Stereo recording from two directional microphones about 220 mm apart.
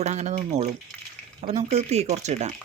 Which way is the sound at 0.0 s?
30° right (ahead or behind).